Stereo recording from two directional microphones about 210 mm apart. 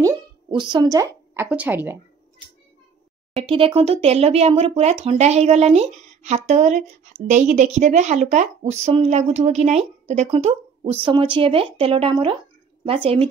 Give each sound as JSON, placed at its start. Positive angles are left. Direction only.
{"t": 0.0, "sound": "speech", "side_deg": -20}
{"t": 3.4, "sound": "speech", "side_deg": -25}